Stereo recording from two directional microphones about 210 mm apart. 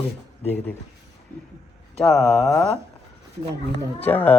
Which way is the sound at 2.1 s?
Centre (ahead or behind).